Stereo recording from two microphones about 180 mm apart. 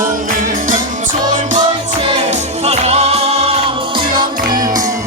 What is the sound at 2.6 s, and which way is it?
Music, 35° right (ahead or behind).